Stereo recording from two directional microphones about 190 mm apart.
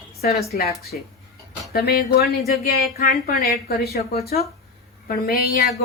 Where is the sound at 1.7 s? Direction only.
55° left (ahead or behind).